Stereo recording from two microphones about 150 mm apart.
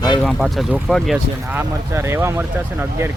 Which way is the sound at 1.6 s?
15° right (ahead or behind).